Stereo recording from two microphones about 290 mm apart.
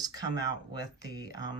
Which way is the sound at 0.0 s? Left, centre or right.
Centre.